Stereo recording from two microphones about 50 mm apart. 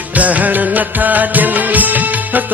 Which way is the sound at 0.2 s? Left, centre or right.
Right.